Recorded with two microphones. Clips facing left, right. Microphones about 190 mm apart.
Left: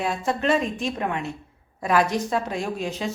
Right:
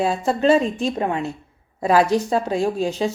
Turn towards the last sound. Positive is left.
turn(degrees=-30)  # may be behind; listen again after turning